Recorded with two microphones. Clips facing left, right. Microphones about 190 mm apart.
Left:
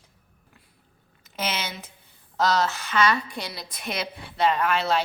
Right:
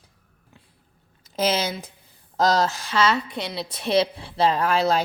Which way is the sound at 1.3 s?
35° right (ahead or behind).